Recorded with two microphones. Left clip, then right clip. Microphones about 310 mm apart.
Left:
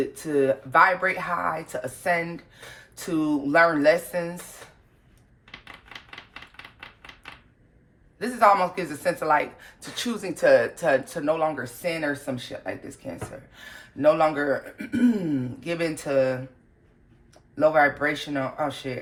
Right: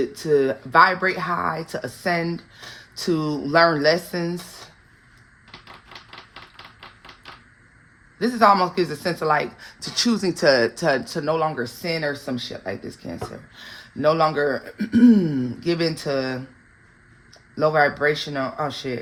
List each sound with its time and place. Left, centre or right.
0.2 s speech: right
8.2 s speech: right
17.5 s speech: right